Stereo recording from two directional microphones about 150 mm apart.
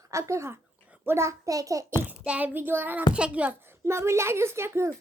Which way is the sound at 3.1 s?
10° right (ahead or behind).